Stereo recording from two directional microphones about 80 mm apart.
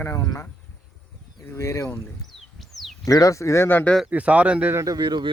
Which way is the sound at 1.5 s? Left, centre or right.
Left.